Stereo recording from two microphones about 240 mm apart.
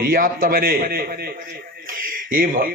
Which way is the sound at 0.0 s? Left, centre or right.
Right.